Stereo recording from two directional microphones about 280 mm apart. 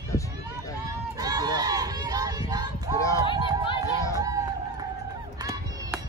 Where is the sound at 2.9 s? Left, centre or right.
Centre.